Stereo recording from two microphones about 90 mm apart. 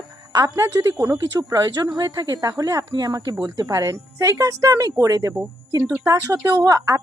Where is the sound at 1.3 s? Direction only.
45° right (ahead or behind).